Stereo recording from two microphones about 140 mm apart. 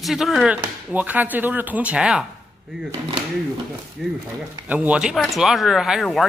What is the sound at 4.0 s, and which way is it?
A man's voice, centre (ahead or behind).